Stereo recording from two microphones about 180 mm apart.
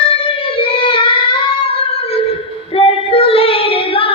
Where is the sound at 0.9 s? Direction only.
30° left (ahead or behind).